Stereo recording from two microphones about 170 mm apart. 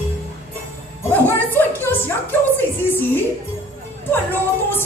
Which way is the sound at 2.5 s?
10° left (ahead or behind).